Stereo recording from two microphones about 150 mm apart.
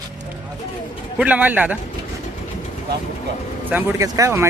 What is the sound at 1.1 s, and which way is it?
Speech, 10° right (ahead or behind).